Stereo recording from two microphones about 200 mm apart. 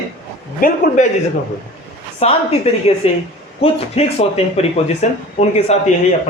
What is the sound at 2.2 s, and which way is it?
Speech, 30° left (ahead or behind).